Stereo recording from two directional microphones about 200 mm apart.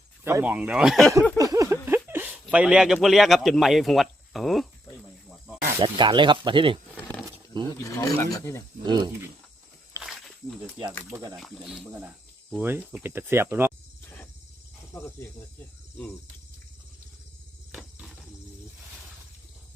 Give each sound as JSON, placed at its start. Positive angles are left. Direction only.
{"t": 0.3, "sound": "speech", "side_deg": -10}
{"t": 1.4, "sound": "a sound", "side_deg": -15}
{"t": 2.0, "sound": "speech", "side_deg": -10}
{"t": 5.8, "sound": "speech", "side_deg": -25}
{"t": 7.7, "sound": "speech", "side_deg": 15}
{"t": 8.8, "sound": "speech", "side_deg": -20}
{"t": 10.0, "sound": "a sound", "side_deg": -15}
{"t": 11.1, "sound": "speech", "side_deg": -20}
{"t": 11.3, "sound": "speech", "side_deg": 0}
{"t": 11.9, "sound": "cricket", "side_deg": -5}
{"t": 13.0, "sound": "speech", "side_deg": -10}
{"t": 14.9, "sound": "speech", "side_deg": 15}
{"t": 17.7, "sound": "a sound", "side_deg": -5}